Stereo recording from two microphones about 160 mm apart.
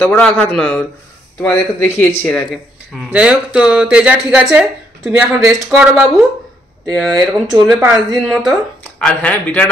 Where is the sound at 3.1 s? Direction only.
5° right (ahead or behind).